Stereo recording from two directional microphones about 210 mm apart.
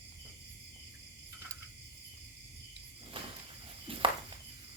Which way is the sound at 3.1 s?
25° right (ahead or behind).